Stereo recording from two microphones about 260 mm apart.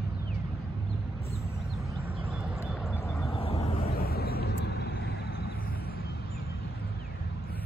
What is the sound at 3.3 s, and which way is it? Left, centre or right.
Vehicle, left.